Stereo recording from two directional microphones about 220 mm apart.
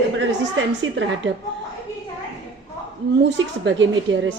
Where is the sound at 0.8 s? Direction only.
55° right (ahead or behind).